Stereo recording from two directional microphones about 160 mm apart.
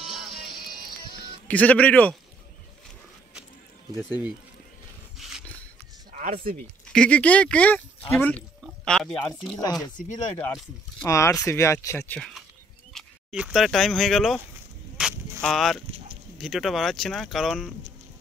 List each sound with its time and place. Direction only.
1.5 s speech: 10° left (ahead or behind)
5.1 s a sound: centre (ahead or behind)
6.9 s speech: 5° left (ahead or behind)
9.5 s speech: 25° left (ahead or behind)
9.9 s speech: 50° left (ahead or behind)
10.3 s speech: 15° left (ahead or behind)
12.9 s speech: 5° right (ahead or behind)
15.0 s a sound: 5° right (ahead or behind)
15.4 s speech: centre (ahead or behind)